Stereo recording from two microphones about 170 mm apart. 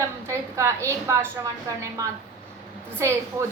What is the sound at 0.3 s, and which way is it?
A woman's voice, 15° right (ahead or behind).